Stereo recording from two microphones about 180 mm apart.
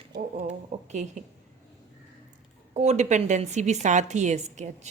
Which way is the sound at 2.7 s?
40° right (ahead or behind).